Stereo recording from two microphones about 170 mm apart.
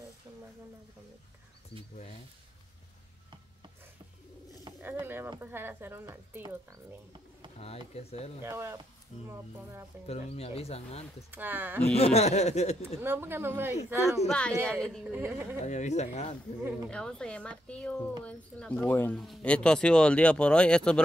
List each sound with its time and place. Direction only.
4.8 s speech: 15° right (ahead or behind)
7.5 s speech: 35° left (ahead or behind)
8.4 s speech: 15° right (ahead or behind)
10.0 s speech: 35° left (ahead or behind)
11.2 s speech: 10° right (ahead or behind)
11.8 s speech: 40° left (ahead or behind)
13.0 s speech: 15° right (ahead or behind)
14.2 s speech: 5° left (ahead or behind)
15.0 s speech: 10° right (ahead or behind)
15.6 s speech: 45° left (ahead or behind)
16.9 s speech: 5° left (ahead or behind)